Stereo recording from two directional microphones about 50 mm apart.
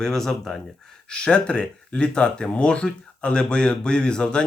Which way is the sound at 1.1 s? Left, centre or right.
Centre.